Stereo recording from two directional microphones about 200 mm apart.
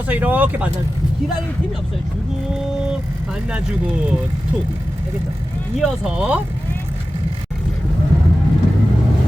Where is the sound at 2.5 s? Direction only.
Centre (ahead or behind).